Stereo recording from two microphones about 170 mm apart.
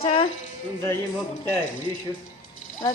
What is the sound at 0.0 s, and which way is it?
Speech, 35° left (ahead or behind).